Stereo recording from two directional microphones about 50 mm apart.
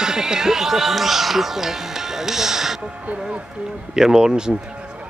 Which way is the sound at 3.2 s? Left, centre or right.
Centre.